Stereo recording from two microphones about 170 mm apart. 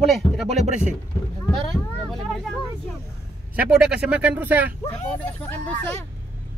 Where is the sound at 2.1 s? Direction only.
Centre (ahead or behind).